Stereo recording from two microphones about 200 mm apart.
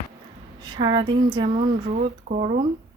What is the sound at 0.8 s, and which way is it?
Speech, 20° right (ahead or behind).